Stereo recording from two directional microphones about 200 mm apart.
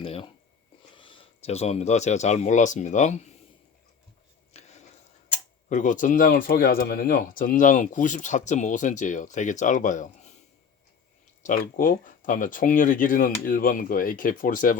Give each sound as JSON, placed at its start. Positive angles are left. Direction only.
{"t": 0.0, "sound": "a sound", "side_deg": 25}
{"t": 0.9, "sound": "speech", "side_deg": 25}
{"t": 5.6, "sound": "speech", "side_deg": 40}
{"t": 11.4, "sound": "speech", "side_deg": 45}